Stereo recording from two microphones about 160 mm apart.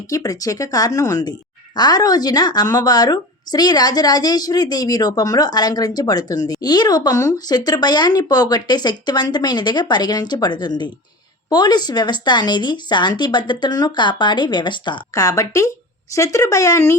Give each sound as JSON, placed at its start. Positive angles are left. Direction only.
{"t": 0.1, "sound": "a woman's voice", "side_deg": 20}